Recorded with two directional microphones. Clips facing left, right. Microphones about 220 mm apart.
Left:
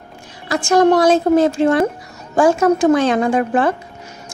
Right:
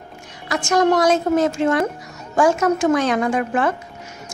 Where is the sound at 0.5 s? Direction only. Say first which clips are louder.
Left 4 dB; 30° left (ahead or behind).